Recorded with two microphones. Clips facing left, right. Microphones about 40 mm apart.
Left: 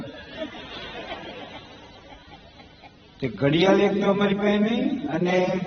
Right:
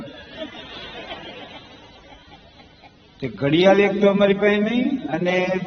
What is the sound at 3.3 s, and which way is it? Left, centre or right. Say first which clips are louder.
A man's voice: right 4 dB; right.